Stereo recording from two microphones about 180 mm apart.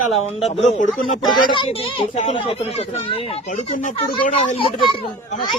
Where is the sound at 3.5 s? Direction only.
45° left (ahead or behind).